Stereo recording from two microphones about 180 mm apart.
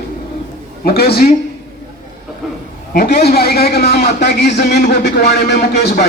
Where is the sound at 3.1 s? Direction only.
65° left (ahead or behind).